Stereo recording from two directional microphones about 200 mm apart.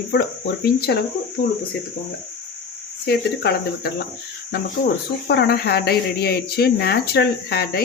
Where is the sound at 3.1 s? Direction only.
50° left (ahead or behind).